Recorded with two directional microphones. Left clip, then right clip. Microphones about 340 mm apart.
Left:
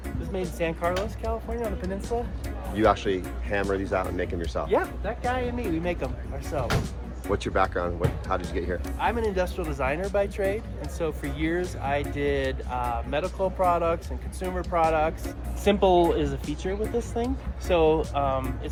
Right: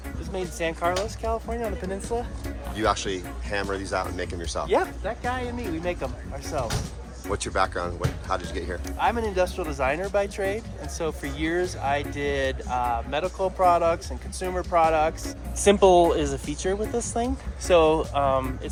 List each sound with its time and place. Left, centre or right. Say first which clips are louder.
0.6 s speech: right 2 dB; right
2.7 s speech: left 3 dB; centre
4.7 s speech: right 2 dB; centre
7.3 s speech: even; centre
9.0 s speech: right 3 dB; centre